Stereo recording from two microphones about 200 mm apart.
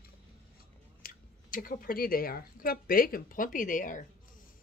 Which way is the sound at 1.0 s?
45° left (ahead or behind).